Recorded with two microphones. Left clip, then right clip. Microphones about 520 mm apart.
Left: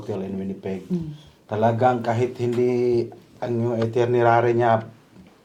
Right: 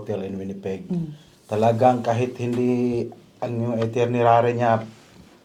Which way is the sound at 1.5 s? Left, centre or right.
Centre.